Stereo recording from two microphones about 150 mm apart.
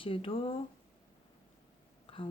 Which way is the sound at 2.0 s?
35° left (ahead or behind).